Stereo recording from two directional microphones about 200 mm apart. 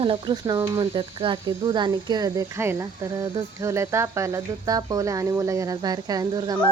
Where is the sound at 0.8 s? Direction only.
25° right (ahead or behind).